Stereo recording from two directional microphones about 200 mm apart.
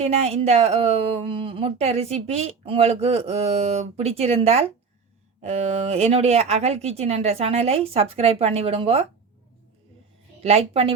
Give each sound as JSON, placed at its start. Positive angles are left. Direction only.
{"t": 0.0, "sound": "speech", "side_deg": -30}
{"t": 10.4, "sound": "a woman's voice", "side_deg": -30}